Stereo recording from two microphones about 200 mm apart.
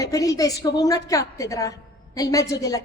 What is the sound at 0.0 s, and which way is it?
A woman's voice, 15° left (ahead or behind).